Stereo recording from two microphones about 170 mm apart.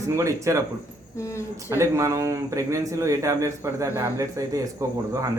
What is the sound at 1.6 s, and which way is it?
Speech, 15° right (ahead or behind).